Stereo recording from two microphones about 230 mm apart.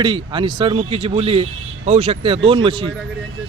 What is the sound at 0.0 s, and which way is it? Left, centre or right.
A man's voice, centre.